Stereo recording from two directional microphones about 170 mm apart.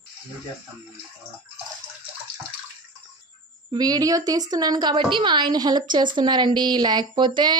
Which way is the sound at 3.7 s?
25° right (ahead or behind).